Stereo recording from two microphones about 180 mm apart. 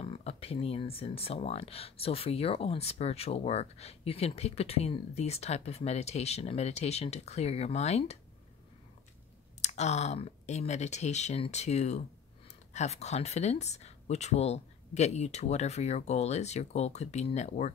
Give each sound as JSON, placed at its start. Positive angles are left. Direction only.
{"t": 0.0, "sound": "speech", "side_deg": 35}
{"t": 9.6, "sound": "speech", "side_deg": 40}